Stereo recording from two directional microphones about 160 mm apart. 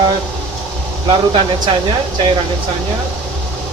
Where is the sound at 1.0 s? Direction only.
30° right (ahead or behind).